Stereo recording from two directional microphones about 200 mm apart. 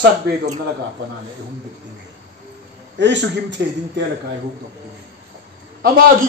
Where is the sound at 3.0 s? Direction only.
60° right (ahead or behind).